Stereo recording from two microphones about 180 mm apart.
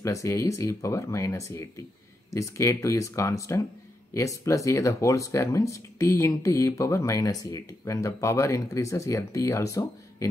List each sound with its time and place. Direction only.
0.0 s speech: 15° left (ahead or behind)